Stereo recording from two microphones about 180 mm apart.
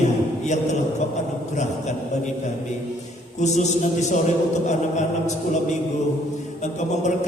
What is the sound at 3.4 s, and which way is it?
A man's voice, 40° left (ahead or behind).